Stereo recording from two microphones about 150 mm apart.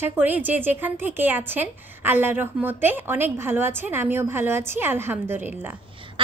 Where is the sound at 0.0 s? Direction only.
15° right (ahead or behind).